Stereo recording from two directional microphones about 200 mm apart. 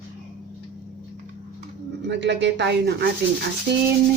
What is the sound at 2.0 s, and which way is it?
Speech, 60° right (ahead or behind).